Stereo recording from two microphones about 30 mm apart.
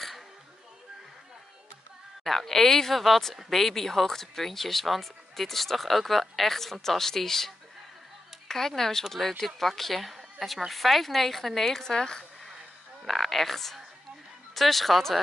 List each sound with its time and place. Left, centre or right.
2.2 s speech: centre
11.8 s speech: centre
13.0 s speech: centre